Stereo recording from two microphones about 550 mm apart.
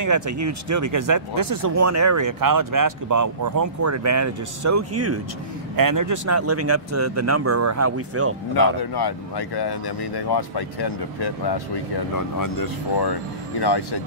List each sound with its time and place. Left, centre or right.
0.0 s speech: right
8.9 s speech: left